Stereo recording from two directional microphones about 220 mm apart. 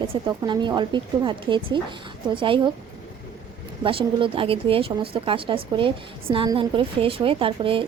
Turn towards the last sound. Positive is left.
turn(degrees=-25)  # may be behind; listen again after turning